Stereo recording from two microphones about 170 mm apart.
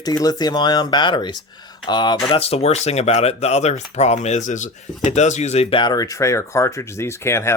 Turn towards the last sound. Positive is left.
turn(degrees=15)  # may be behind; listen again after turning